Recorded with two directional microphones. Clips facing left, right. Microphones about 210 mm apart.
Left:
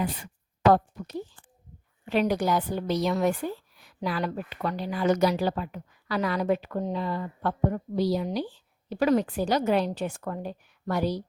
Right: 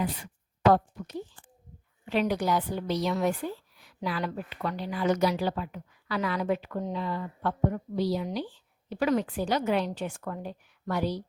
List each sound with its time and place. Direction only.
2.0 s a woman's voice: 45° left (ahead or behind)